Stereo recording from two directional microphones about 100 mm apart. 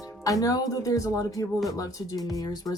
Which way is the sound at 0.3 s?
35° left (ahead or behind).